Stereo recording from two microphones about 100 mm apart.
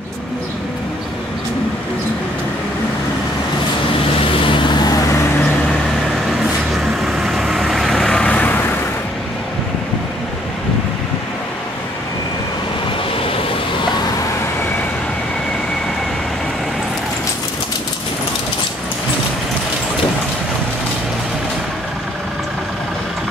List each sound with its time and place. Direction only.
4.2 s vehicle: 55° left (ahead or behind)
7.1 s vehicle: 5° right (ahead or behind); by 8.6 s 15° left (ahead or behind)